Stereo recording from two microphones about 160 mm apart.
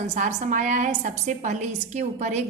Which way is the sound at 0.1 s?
50° right (ahead or behind).